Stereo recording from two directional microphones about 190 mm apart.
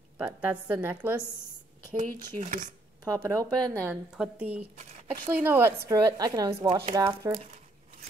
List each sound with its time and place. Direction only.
0.2 s a woman's voice: 10° right (ahead or behind)
2.4 s speech: 40° right (ahead or behind)
3.1 s a woman's voice: 15° right (ahead or behind)
3.8 s a woman's voice: 5° right (ahead or behind)
4.7 s speech: 40° right (ahead or behind)
5.3 s a woman's voice: 10° right (ahead or behind)